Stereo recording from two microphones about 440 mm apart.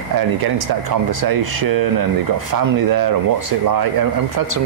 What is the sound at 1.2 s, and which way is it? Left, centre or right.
Speech, right.